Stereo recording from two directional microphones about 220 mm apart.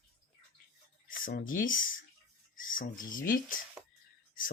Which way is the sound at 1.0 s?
40° left (ahead or behind).